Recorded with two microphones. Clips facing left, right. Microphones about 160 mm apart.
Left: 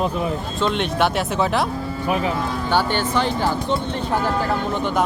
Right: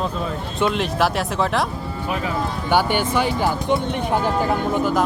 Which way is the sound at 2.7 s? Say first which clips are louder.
Right 2 dB; 15° right (ahead or behind).